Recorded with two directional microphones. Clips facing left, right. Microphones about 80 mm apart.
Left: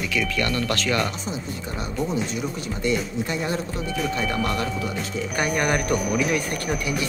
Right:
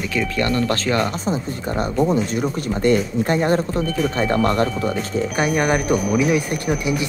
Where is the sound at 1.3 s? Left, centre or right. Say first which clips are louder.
Right 7 dB; right.